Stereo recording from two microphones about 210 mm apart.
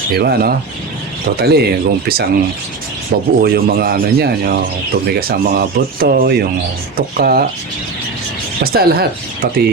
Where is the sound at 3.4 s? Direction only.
45° right (ahead or behind).